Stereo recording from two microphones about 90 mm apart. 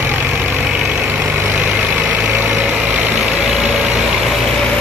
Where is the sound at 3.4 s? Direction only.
5° right (ahead or behind).